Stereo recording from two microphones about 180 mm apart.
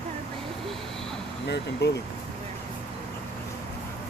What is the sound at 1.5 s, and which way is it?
Speech, 70° left (ahead or behind).